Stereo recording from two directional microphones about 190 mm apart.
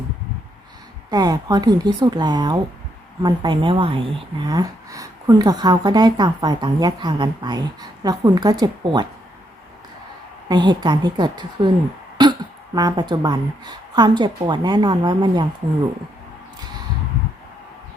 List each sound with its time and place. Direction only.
1.1 s speech: 20° right (ahead or behind)
10.5 s speech: 25° right (ahead or behind)